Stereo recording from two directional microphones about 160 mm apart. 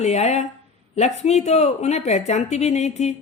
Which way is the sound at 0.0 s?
45° left (ahead or behind).